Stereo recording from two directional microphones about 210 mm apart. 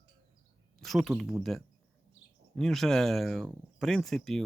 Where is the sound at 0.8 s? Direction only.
Centre (ahead or behind).